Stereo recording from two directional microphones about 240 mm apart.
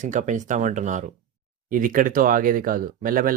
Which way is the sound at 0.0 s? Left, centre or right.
Right.